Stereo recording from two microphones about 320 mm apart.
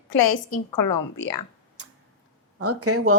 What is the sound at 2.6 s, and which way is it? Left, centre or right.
Speech, right.